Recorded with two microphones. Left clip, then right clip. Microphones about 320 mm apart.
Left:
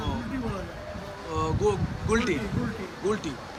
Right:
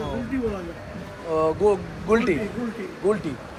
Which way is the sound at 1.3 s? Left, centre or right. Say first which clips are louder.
Right 6 dB; centre.